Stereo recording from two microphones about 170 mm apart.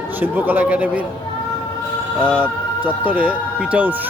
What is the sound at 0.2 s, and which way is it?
Speech, 10° right (ahead or behind).